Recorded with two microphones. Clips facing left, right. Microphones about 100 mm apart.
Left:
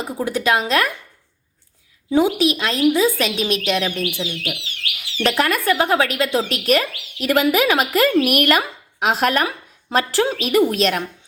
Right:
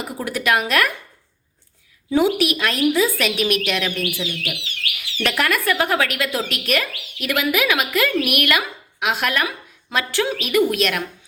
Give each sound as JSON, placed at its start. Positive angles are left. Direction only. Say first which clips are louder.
{"t": 0.2, "sound": "a woman's voice", "louder": "left 1 dB", "side_deg": 25}
{"t": 2.0, "sound": "a woman's voice", "louder": "left 1 dB", "side_deg": 20}